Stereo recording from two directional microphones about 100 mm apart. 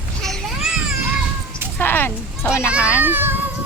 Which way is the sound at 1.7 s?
20° left (ahead or behind).